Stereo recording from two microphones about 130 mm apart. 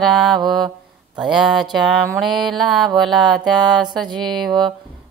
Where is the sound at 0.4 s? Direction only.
35° right (ahead or behind).